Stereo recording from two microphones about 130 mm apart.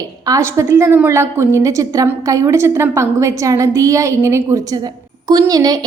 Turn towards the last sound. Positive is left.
turn(degrees=-30)  # may be behind; listen again after turning